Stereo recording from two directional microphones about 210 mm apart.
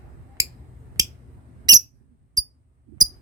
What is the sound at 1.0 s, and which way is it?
Finger snapping, 15° right (ahead or behind).